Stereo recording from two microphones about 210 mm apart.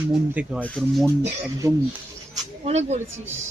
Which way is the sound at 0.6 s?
5° left (ahead or behind).